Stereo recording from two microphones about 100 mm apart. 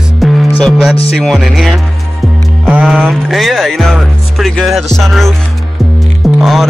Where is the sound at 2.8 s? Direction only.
5° left (ahead or behind).